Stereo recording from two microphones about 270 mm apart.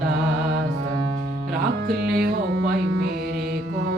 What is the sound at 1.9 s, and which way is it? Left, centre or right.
Music, right.